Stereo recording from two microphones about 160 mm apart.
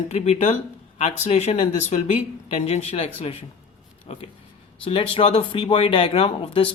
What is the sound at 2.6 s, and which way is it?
Speech, 40° left (ahead or behind).